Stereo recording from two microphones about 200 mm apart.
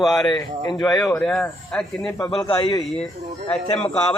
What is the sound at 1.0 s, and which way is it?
Speech, 5° left (ahead or behind).